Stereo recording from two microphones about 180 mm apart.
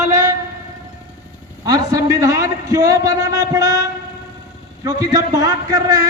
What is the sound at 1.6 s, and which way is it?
A man's voice, 20° right (ahead or behind).